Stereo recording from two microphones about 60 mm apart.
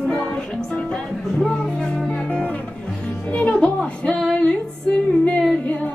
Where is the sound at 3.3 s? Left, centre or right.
Left.